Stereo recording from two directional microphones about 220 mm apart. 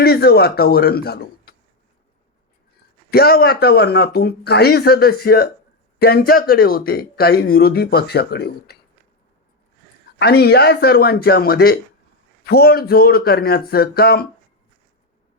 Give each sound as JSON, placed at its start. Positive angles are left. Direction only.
{"t": 0.0, "sound": "speech", "side_deg": 45}
{"t": 3.1, "sound": "speech", "side_deg": 45}
{"t": 10.2, "sound": "speech", "side_deg": 45}